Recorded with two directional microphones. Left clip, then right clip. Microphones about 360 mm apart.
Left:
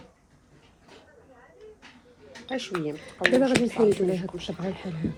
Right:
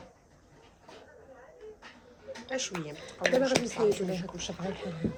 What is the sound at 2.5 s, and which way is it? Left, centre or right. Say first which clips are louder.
Speech: left 5 dB; centre.